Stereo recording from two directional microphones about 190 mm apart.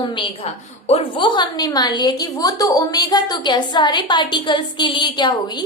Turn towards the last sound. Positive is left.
turn(degrees=20)  # may be behind; listen again after turning